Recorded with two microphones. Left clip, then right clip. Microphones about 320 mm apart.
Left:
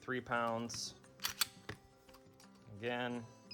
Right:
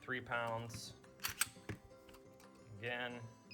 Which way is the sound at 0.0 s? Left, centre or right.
Centre.